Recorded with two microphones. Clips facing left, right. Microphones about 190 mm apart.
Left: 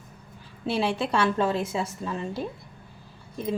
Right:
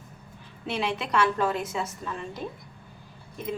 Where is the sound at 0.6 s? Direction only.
35° left (ahead or behind).